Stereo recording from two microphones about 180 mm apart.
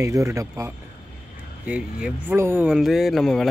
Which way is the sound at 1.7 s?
5° right (ahead or behind).